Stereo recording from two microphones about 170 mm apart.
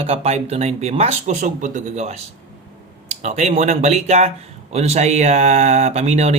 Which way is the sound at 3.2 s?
40° right (ahead or behind).